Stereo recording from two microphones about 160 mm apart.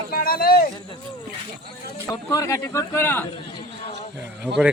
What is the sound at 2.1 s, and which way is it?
A man's voice, 20° left (ahead or behind).